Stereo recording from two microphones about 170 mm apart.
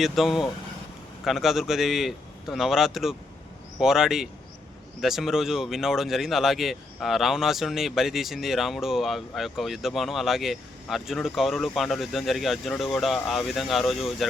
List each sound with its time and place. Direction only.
0.0 s speech: centre (ahead or behind)